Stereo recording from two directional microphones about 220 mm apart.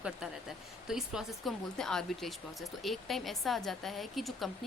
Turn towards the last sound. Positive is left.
turn(degrees=0)  # may be behind; listen again after turning